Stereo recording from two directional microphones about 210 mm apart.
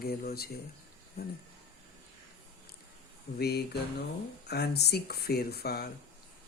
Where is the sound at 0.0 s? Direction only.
45° left (ahead or behind).